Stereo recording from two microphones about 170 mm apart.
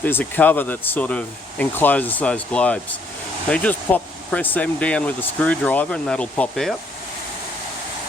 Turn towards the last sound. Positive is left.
turn(degrees=0)  # may be behind; listen again after turning